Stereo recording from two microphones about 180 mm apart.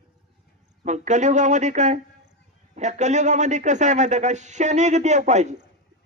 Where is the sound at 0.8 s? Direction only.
40° right (ahead or behind).